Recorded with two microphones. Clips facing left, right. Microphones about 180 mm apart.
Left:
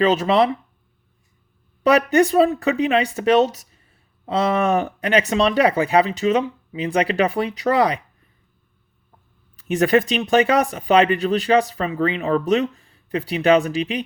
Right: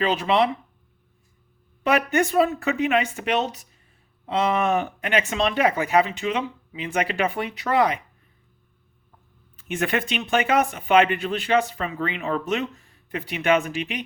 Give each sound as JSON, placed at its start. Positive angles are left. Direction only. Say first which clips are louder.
{"t": 0.0, "sound": "speech", "louder": "left 4 dB", "side_deg": 40}
{"t": 1.8, "sound": "speech", "louder": "left 6 dB", "side_deg": 35}
{"t": 9.6, "sound": "speech", "louder": "left 8 dB", "side_deg": 35}